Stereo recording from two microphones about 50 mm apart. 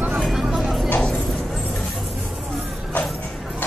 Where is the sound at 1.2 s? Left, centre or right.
Centre.